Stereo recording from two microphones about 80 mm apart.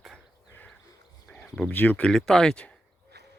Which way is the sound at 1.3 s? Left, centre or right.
Centre.